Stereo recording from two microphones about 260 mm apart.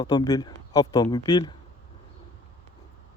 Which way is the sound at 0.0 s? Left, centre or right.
Centre.